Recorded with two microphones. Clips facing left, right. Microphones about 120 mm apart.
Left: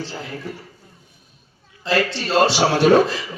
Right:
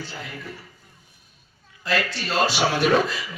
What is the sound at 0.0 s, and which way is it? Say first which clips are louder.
Speech: left 5 dB; 30° left (ahead or behind).